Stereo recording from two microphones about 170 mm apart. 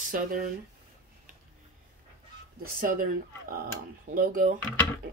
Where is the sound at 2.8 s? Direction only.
55° right (ahead or behind).